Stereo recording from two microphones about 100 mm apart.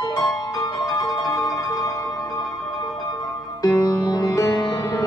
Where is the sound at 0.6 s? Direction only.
45° left (ahead or behind).